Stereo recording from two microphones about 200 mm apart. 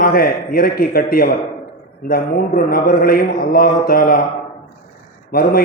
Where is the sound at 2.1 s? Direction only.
45° left (ahead or behind).